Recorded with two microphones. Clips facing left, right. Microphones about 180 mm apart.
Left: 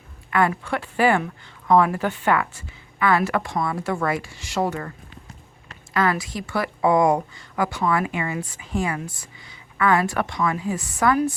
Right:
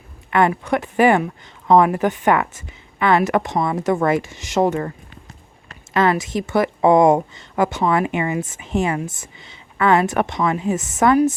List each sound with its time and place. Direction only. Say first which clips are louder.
0.3 s speech: right 4 dB; 20° right (ahead or behind)
5.9 s speech: right 5 dB; 25° right (ahead or behind)